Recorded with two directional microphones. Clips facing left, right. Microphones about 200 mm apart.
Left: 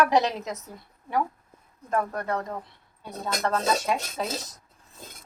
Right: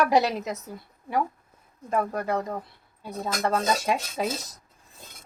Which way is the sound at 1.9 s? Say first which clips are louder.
Right 1 dB; 10° right (ahead or behind).